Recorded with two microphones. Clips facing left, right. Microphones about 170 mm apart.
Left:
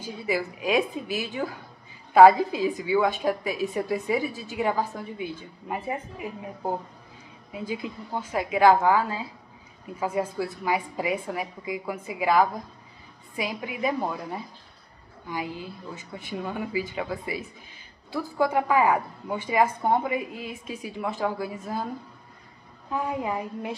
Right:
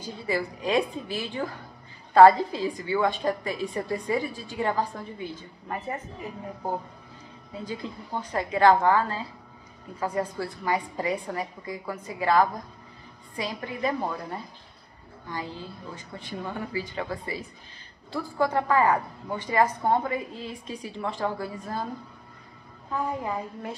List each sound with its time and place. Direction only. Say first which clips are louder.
0.0 s a woman's voice: left 1 dB; 10° left (ahead or behind)
22.8 s a woman's voice: left 1 dB; 15° left (ahead or behind)